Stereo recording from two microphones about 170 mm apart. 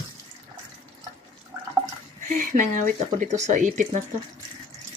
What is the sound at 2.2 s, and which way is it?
Speech, 50° right (ahead or behind).